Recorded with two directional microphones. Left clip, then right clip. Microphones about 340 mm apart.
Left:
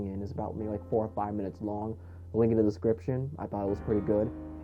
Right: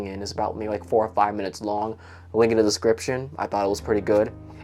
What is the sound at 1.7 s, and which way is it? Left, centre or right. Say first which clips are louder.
Speech: right 12 dB; centre.